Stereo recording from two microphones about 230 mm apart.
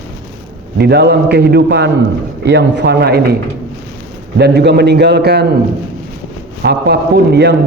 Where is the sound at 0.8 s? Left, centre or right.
Right.